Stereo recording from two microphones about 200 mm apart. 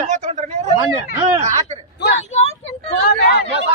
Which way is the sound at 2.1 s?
35° left (ahead or behind).